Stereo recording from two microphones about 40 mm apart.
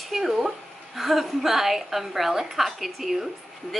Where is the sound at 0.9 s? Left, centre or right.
Centre.